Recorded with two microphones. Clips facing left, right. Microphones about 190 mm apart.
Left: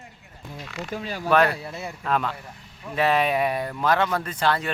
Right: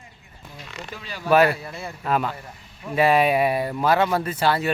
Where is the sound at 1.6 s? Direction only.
20° left (ahead or behind).